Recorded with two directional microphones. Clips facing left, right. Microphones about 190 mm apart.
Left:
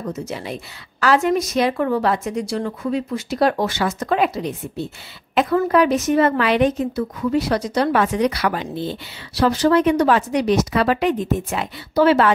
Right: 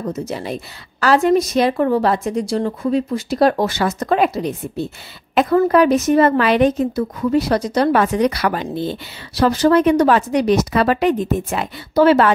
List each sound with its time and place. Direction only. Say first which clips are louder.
0.1 s a woman's voice: right 3 dB; 35° right (ahead or behind)